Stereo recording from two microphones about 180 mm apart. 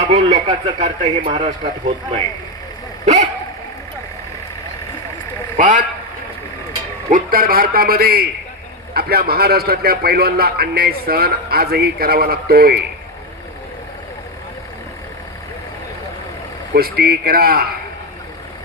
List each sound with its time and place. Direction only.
0.0 s speech: 40° right (ahead or behind)
5.5 s a man's voice: 45° right (ahead or behind)
7.1 s a man's voice: 55° right (ahead or behind)
16.7 s a man's voice: 60° right (ahead or behind)